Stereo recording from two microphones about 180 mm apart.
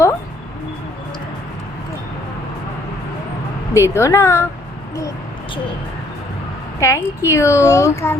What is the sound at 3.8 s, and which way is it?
Speech, 15° left (ahead or behind).